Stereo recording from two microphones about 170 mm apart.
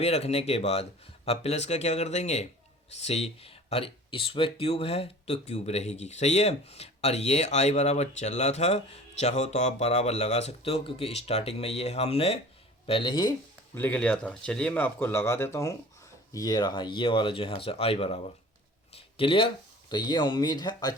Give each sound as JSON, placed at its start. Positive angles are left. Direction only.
{"t": 0.0, "sound": "speech", "side_deg": 35}
{"t": 13.7, "sound": "speech", "side_deg": 10}
{"t": 18.9, "sound": "a sound", "side_deg": 30}
{"t": 19.9, "sound": "speech", "side_deg": 25}